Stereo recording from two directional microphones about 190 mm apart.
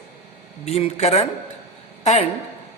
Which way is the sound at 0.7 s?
35° left (ahead or behind).